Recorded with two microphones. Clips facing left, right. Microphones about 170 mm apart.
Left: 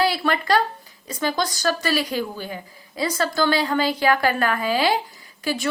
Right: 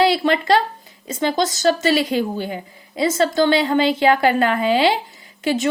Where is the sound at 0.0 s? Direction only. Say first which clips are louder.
Right 5 dB; 25° right (ahead or behind).